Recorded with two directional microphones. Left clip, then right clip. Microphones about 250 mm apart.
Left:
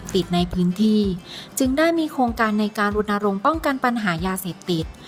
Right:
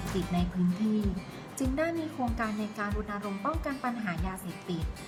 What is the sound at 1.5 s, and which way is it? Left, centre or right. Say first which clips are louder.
A woman's voice: left 12 dB; left.